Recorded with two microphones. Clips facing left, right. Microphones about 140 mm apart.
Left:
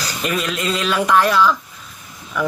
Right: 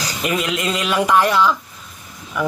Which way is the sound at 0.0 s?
15° right (ahead or behind).